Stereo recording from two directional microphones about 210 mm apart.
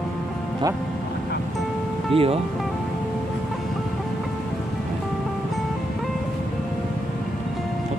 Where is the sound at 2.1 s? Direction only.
25° right (ahead or behind).